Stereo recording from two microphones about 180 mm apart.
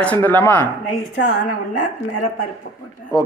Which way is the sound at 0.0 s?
10° left (ahead or behind).